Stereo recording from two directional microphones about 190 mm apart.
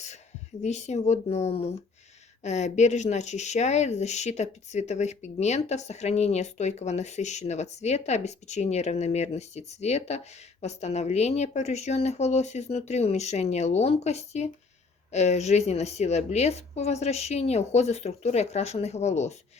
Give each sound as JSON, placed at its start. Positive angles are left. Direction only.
{"t": 0.6, "sound": "speech", "side_deg": 35}